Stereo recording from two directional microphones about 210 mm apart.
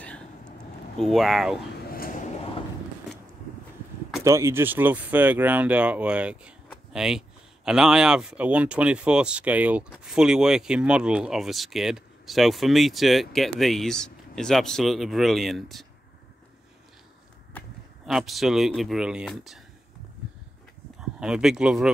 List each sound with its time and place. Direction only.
1.0 s speech: centre (ahead or behind)
1.9 s a sound: 45° left (ahead or behind)
4.2 s speech: 15° right (ahead or behind)
17.6 s speech: centre (ahead or behind)
21.0 s speech: 5° right (ahead or behind)